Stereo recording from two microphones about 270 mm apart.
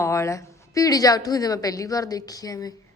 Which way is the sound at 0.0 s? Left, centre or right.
Centre.